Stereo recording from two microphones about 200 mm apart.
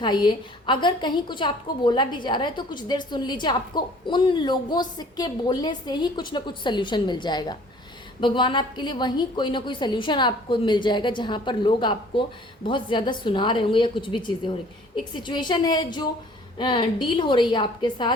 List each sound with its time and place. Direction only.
0.0 s a woman's voice: 20° left (ahead or behind)